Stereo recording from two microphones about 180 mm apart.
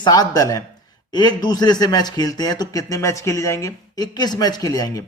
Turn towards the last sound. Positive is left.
turn(degrees=20)  # may be behind; listen again after turning